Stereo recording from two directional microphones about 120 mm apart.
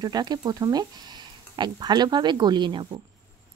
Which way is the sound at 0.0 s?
35° right (ahead or behind).